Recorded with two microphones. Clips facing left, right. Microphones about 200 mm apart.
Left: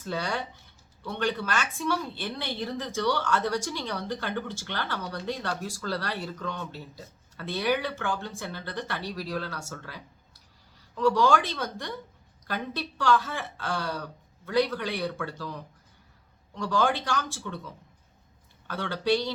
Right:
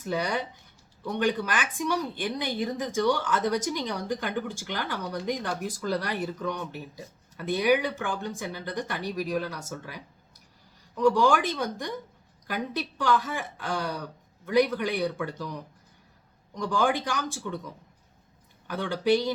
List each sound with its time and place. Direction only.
0.0 s a woman's voice: 15° right (ahead or behind)
18.7 s a woman's voice: 15° right (ahead or behind)